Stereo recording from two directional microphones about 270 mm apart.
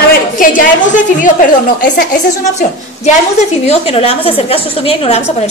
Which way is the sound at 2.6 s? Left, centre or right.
Left.